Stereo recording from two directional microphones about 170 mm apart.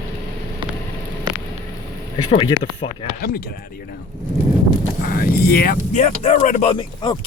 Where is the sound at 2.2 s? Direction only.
30° left (ahead or behind).